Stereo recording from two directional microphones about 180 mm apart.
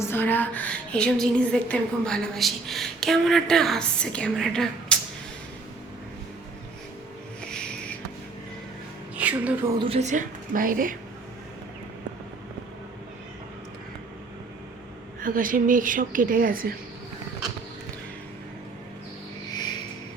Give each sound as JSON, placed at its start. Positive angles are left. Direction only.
{"t": 0.1, "sound": "a woman's voice", "side_deg": 10}
{"t": 9.1, "sound": "music", "side_deg": -10}
{"t": 9.7, "sound": "a woman's voice", "side_deg": -30}
{"t": 15.2, "sound": "a woman's voice", "side_deg": -50}